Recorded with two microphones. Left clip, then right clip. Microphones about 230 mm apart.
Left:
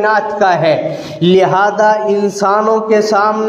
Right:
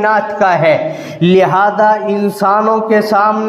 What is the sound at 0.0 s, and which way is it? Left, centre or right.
Speech, right.